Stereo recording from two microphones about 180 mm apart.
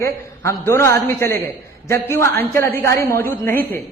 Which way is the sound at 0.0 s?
15° left (ahead or behind).